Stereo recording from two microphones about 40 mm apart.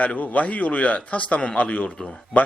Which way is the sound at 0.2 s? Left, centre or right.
Left.